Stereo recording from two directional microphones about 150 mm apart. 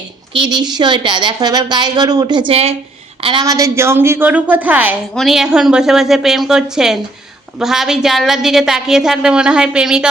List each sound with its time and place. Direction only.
0.3 s a woman's voice: 30° right (ahead or behind)
3.4 s a woman's voice: 20° right (ahead or behind); by 10.1 s 5° right (ahead or behind)